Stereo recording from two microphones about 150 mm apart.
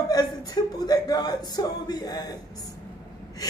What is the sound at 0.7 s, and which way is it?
A man's voice, 25° left (ahead or behind).